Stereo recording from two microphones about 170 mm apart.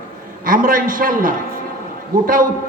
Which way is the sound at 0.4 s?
55° right (ahead or behind).